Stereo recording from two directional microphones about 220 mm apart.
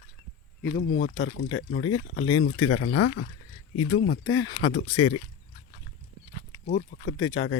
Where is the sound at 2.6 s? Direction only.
75° left (ahead or behind); by 3.1 s 90° left.